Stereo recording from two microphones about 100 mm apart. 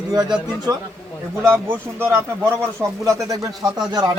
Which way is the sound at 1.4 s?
25° right (ahead or behind).